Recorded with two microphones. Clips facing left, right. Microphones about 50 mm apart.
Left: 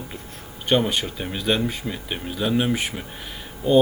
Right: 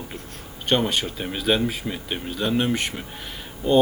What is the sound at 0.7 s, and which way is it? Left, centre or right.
A man's voice, centre.